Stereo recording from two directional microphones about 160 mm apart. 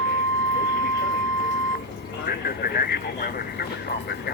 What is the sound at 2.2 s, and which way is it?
Vehicle, 70° left (ahead or behind).